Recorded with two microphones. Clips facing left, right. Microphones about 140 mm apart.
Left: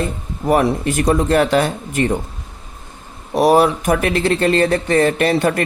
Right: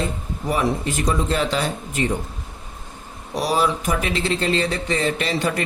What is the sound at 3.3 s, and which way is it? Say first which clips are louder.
Speech: left 8 dB; 55° left (ahead or behind).